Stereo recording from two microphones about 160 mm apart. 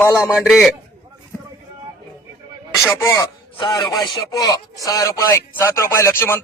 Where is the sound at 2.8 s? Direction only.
15° left (ahead or behind).